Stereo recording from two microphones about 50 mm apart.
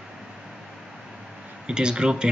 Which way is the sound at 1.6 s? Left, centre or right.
Centre.